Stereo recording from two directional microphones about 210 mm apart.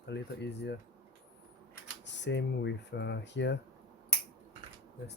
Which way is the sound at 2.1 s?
55° left (ahead or behind).